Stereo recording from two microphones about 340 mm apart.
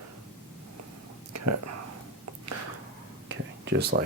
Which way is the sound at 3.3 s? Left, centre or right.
Right.